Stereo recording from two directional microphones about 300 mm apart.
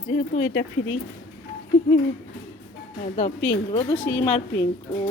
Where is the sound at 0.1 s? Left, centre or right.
Left.